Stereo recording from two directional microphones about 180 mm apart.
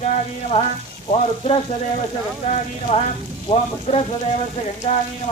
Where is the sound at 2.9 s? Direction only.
30° left (ahead or behind).